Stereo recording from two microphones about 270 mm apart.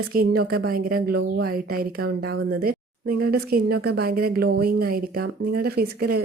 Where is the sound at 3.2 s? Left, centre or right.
Right.